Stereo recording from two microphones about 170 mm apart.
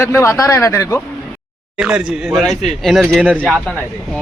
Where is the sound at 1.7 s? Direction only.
5° right (ahead or behind).